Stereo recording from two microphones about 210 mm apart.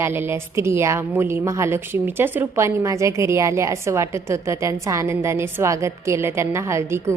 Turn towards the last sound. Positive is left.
turn(degrees=-10)  # may be behind; listen again after turning